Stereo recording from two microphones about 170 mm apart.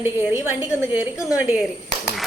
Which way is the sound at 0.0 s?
15° right (ahead or behind).